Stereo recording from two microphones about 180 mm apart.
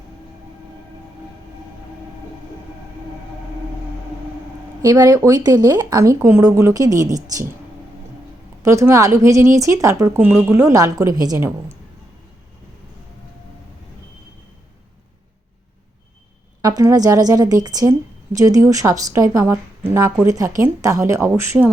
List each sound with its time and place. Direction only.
4.8 s speech: 20° right (ahead or behind)
8.6 s speech: 15° right (ahead or behind)
16.6 s speech: 20° right (ahead or behind)